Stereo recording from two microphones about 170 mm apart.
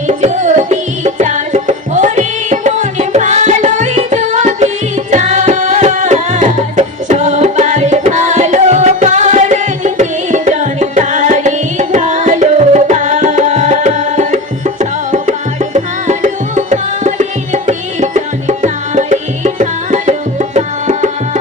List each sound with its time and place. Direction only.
0.1 s music: 45° right (ahead or behind)